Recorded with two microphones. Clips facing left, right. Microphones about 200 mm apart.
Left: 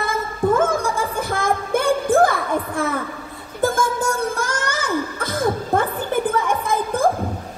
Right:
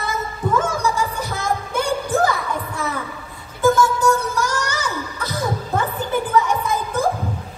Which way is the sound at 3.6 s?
55° left (ahead or behind).